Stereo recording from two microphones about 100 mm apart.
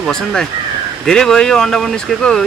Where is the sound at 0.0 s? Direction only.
5° left (ahead or behind).